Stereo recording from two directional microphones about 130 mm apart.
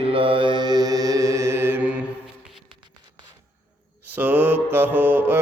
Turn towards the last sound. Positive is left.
turn(degrees=-15)  # may be behind; listen again after turning